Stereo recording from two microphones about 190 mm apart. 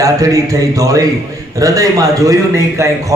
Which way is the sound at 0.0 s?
20° right (ahead or behind).